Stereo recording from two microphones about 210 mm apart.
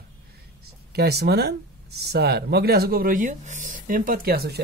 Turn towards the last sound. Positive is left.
turn(degrees=-45)  # may be behind; listen again after turning